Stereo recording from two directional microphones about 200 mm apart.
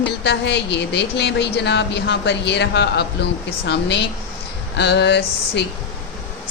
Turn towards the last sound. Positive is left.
turn(degrees=60)  # may be behind; listen again after turning